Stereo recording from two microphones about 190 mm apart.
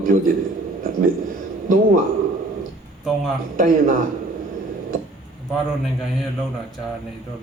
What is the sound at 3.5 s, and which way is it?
Speech, 45° right (ahead or behind).